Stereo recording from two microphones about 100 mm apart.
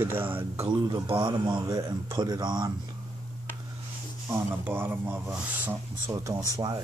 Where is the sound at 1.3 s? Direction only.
40° right (ahead or behind).